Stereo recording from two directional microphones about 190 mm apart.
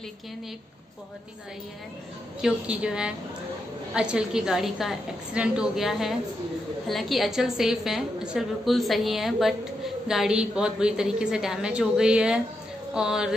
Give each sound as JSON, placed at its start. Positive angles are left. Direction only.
{"t": 2.4, "sound": "a woman's voice", "side_deg": -5}